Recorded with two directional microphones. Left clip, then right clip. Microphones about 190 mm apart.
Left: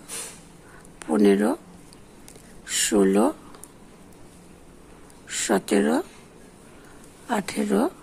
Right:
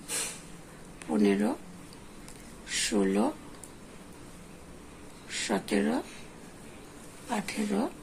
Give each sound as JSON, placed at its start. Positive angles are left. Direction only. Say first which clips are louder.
{"t": 1.0, "sound": "speech", "louder": "left 8 dB", "side_deg": 50}
{"t": 2.6, "sound": "a sound", "louder": "left 8 dB", "side_deg": 50}
{"t": 5.3, "sound": "speech", "louder": "left 7 dB", "side_deg": 50}
{"t": 7.2, "sound": "speech", "louder": "left 7 dB", "side_deg": 50}